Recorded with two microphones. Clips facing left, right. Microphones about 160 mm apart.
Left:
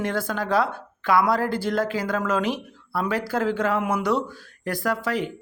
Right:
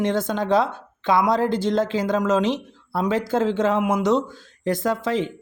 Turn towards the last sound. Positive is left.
turn(degrees=-20)  # may be behind; listen again after turning